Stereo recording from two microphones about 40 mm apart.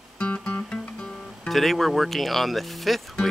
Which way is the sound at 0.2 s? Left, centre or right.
Left.